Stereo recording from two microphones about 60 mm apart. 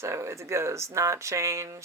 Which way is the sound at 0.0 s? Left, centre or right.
Right.